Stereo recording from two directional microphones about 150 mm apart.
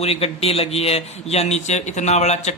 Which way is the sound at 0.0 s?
40° left (ahead or behind).